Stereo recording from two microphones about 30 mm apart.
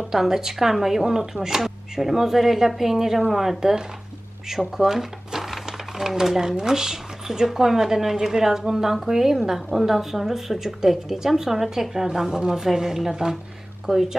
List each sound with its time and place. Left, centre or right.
0.1 s a woman's voice: centre
1.6 s a woman's voice: centre
4.7 s a sound: centre
6.5 s a woman's voice: centre